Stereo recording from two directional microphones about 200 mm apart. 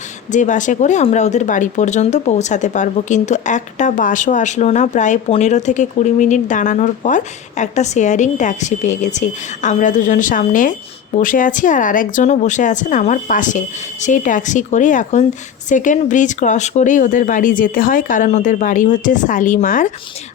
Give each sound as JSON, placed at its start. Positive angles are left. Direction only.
{"t": 0.3, "sound": "speech", "side_deg": 40}